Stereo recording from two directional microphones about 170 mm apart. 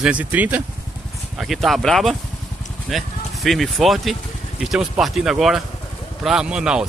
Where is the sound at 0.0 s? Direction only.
10° right (ahead or behind).